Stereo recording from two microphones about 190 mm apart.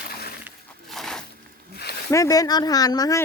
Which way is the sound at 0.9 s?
Centre (ahead or behind).